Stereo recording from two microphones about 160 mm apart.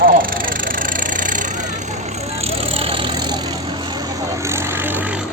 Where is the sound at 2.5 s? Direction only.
35° right (ahead or behind).